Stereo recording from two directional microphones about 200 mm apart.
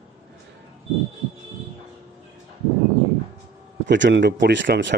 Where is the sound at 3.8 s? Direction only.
60° right (ahead or behind).